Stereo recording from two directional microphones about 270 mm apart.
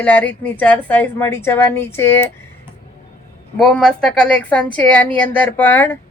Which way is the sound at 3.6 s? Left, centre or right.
Centre.